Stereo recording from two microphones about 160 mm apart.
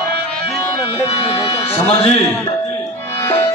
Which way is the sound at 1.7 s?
35° left (ahead or behind).